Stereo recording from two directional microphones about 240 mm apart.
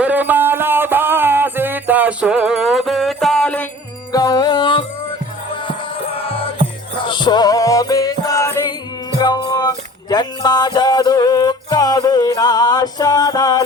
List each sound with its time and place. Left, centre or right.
0.0 s music: centre
4.1 s music: centre
5.9 s music: left